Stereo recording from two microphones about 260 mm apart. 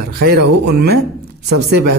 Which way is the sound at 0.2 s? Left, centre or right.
Right.